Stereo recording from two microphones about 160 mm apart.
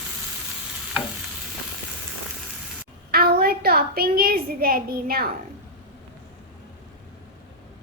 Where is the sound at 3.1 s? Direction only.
70° right (ahead or behind).